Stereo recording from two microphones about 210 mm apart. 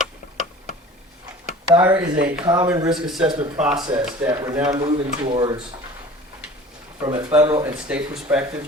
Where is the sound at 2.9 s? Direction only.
Centre (ahead or behind).